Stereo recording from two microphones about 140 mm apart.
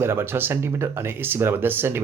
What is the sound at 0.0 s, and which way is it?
Speech, 15° right (ahead or behind).